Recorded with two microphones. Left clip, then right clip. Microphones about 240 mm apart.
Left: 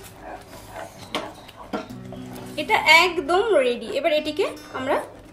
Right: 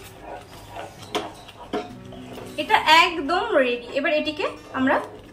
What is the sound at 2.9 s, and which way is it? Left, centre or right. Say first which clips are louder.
Music: left 2 dB; left.